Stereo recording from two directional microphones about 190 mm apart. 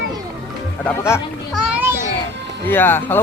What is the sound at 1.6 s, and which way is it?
Children playing, 5° right (ahead or behind).